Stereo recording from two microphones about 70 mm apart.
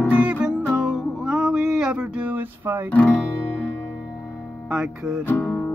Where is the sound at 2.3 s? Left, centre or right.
Right.